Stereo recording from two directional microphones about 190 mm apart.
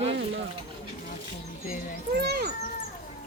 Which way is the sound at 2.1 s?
60° right (ahead or behind).